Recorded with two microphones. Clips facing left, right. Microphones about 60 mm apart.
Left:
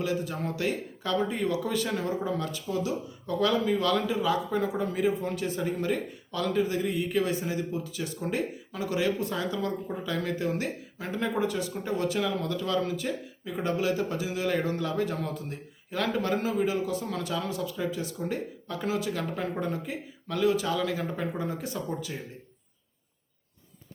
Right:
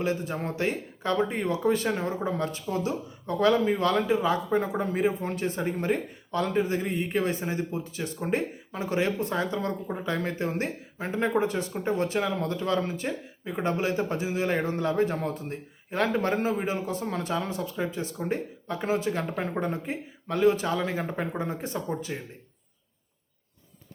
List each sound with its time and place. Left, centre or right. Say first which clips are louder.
0.0 s speech: right 1 dB; right